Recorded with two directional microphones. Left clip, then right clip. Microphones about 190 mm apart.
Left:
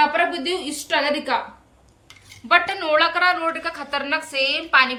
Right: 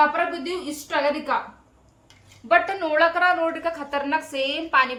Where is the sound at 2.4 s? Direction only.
25° right (ahead or behind).